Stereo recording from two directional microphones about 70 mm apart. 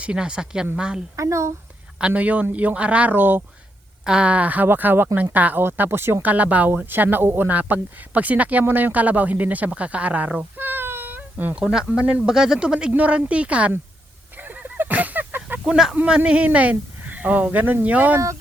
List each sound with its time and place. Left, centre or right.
0.0 s speech: centre
1.1 s speech: right
2.0 s speech: centre
4.0 s speech: centre; by 6.1 s right
6.2 s speech: right
11.6 s speech: centre
14.3 s a sound: right; by 16.0 s centre
16.0 s speech: centre